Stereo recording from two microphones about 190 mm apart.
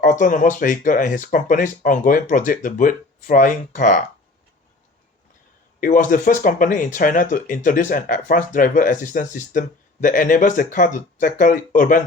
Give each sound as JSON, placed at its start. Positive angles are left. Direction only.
{"t": 0.0, "sound": "speech", "side_deg": 45}
{"t": 5.8, "sound": "speech", "side_deg": 45}